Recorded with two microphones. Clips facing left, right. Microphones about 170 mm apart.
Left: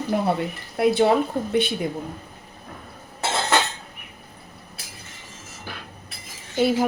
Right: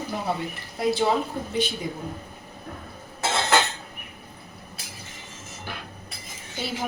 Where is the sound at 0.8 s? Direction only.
60° left (ahead or behind).